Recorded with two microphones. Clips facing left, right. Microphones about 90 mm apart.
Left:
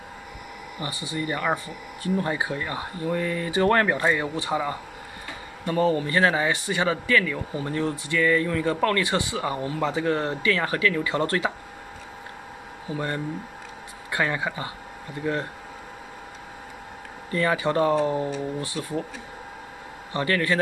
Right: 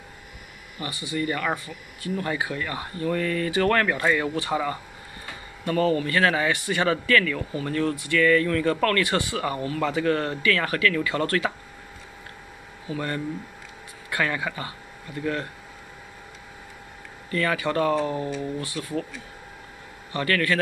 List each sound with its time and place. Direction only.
0.7 s speech: 25° left (ahead or behind)
12.9 s speech: 20° left (ahead or behind)
17.3 s speech: 25° left (ahead or behind)
20.1 s speech: 25° left (ahead or behind)